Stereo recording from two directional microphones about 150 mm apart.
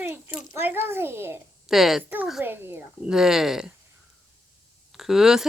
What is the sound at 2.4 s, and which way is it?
Speech, 15° right (ahead or behind).